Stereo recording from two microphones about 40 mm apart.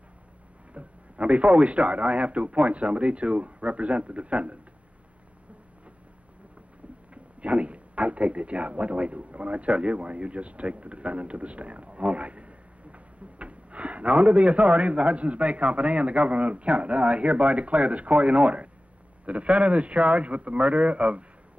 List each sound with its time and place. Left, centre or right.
0.7 s a man's voice: right
7.4 s a man's voice: right